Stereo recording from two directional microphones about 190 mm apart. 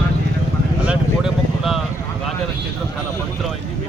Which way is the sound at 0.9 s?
Centre (ahead or behind).